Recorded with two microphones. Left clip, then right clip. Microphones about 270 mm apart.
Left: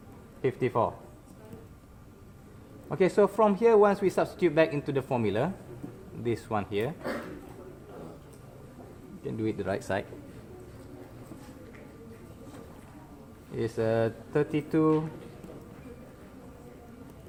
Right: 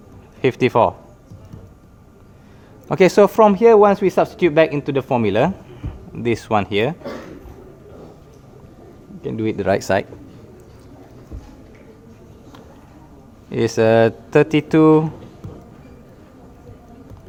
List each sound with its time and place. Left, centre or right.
0.4 s speech: right
2.9 s speech: right
9.2 s speech: right
13.5 s speech: right